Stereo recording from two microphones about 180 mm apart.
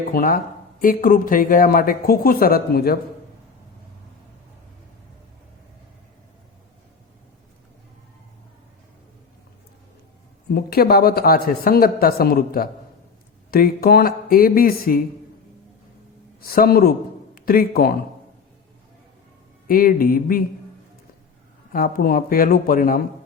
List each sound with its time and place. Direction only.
0.1 s speech: 55° left (ahead or behind)
10.5 s speech: 60° left (ahead or behind)
16.4 s a man's voice: 55° left (ahead or behind)
19.6 s speech: 50° left (ahead or behind)
21.7 s speech: 55° left (ahead or behind)